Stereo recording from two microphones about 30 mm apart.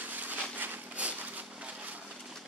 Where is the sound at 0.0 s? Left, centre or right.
Right.